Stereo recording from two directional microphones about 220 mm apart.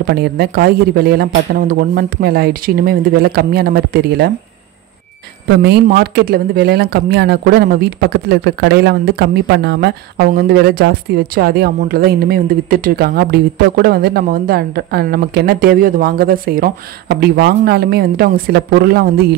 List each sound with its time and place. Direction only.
0.0 s speech: 45° right (ahead or behind)
5.5 s speech: 45° right (ahead or behind)